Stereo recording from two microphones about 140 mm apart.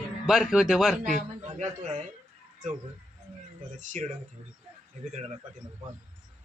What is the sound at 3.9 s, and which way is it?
Speech, 60° right (ahead or behind).